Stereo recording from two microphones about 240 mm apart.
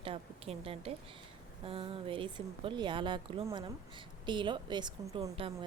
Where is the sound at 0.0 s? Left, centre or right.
Right.